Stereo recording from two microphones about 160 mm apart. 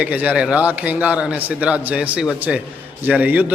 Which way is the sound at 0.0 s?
10° right (ahead or behind).